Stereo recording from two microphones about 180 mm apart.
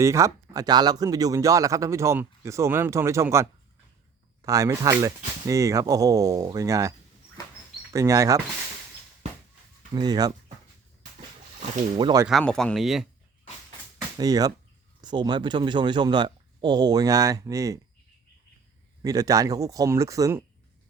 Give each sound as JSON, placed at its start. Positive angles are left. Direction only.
{"t": 0.0, "sound": "speech", "side_deg": -15}
{"t": 4.4, "sound": "speech", "side_deg": -20}
{"t": 7.9, "sound": "speech", "side_deg": -15}
{"t": 9.9, "sound": "speech", "side_deg": -20}
{"t": 11.9, "sound": "speech", "side_deg": -25}
{"t": 12.2, "sound": "speech", "side_deg": 0}
{"t": 14.2, "sound": "speech", "side_deg": -20}
{"t": 19.0, "sound": "speech", "side_deg": -20}